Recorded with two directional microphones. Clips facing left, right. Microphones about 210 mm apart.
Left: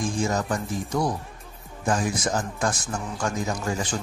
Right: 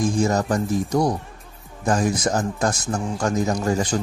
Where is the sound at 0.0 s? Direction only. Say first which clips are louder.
Right 5 dB; 40° right (ahead or behind).